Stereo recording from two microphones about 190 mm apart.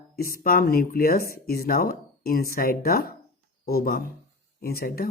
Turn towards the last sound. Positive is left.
turn(degrees=50)  # may be behind; listen again after turning